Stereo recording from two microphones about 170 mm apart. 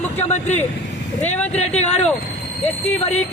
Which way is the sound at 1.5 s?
40° left (ahead or behind).